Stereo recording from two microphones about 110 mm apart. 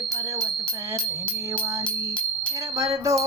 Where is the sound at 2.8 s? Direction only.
30° right (ahead or behind).